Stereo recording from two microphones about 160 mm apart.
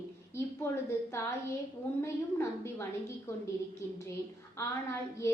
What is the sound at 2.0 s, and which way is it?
A woman's voice, 15° left (ahead or behind).